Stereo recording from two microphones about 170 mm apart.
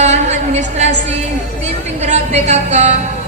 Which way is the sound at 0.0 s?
40° right (ahead or behind).